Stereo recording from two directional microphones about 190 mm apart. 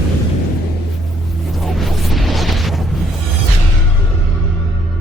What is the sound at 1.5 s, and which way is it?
Music, centre (ahead or behind).